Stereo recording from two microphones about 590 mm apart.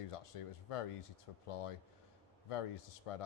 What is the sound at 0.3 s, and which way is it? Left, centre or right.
Speech, left.